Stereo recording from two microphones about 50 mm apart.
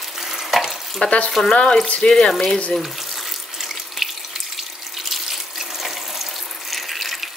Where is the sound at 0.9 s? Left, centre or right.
Left.